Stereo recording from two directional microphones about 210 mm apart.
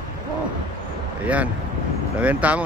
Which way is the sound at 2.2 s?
5° right (ahead or behind).